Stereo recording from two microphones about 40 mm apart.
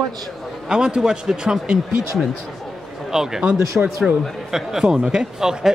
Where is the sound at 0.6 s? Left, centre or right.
Right.